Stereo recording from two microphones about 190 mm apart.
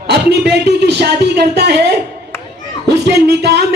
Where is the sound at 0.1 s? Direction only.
60° right (ahead or behind).